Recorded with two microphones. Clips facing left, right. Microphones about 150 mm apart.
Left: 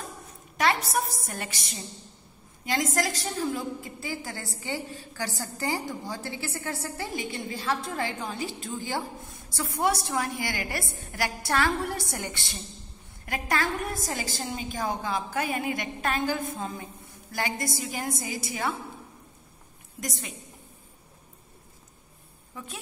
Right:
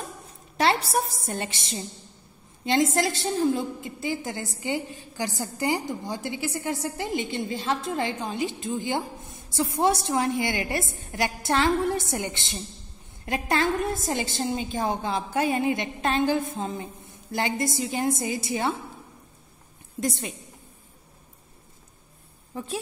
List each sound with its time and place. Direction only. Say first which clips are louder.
0.6 s a woman's voice: right 2 dB; 30° right (ahead or behind)
20.0 s a woman's voice: right 7 dB; 30° right (ahead or behind)
22.5 s speech: right 9 dB; 35° right (ahead or behind)